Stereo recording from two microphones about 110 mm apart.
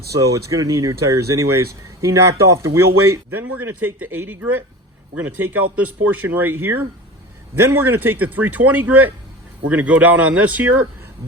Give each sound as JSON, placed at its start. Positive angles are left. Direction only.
{"t": 0.2, "sound": "speech", "side_deg": -30}
{"t": 3.3, "sound": "speech", "side_deg": -20}